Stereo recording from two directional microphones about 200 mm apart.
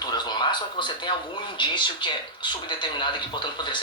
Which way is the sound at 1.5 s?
25° left (ahead or behind).